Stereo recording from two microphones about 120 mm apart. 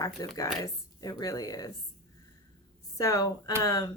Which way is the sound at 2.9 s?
30° left (ahead or behind).